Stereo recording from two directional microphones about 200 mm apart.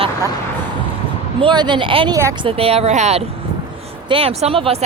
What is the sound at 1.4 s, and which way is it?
Speech, 20° right (ahead or behind).